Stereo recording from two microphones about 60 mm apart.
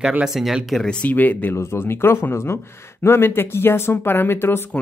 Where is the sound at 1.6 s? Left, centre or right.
Left.